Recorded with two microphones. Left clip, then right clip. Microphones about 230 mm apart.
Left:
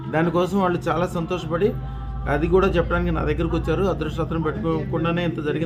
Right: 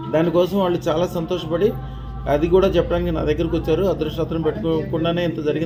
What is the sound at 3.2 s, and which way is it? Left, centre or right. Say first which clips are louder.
Speech: right 4 dB; left.